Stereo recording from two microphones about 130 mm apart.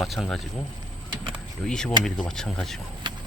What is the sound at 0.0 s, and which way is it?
Speech, centre (ahead or behind).